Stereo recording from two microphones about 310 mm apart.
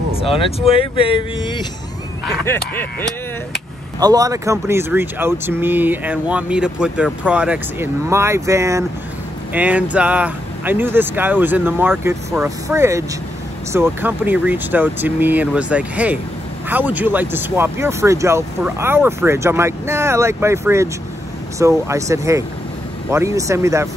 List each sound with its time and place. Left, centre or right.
0.2 s speech: centre
2.7 s speech: centre
4.0 s speech: centre